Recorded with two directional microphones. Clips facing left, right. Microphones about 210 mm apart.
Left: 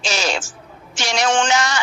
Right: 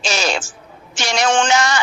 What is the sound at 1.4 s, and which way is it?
Speech, 50° right (ahead or behind).